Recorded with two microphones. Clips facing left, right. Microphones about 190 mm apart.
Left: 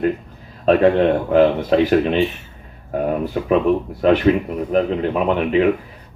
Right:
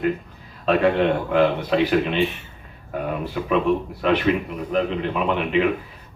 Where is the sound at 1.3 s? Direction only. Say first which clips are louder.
Left 5 dB; 40° left (ahead or behind).